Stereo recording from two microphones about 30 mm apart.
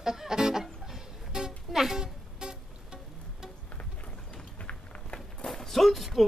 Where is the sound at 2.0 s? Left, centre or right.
Right.